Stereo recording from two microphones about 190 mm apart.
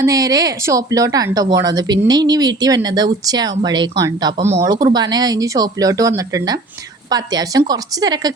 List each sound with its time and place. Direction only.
0.0 s speech: 20° right (ahead or behind)